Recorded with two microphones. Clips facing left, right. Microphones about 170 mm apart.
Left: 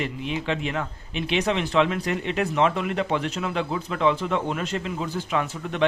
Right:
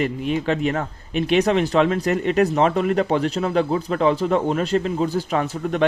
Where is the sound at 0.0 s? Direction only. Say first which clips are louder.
Right 6 dB; 45° right (ahead or behind).